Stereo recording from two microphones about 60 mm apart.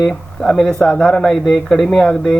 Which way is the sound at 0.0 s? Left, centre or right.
Centre.